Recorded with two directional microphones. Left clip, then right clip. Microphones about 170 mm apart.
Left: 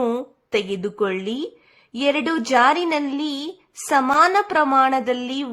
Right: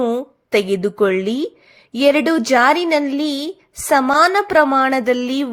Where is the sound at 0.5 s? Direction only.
20° right (ahead or behind).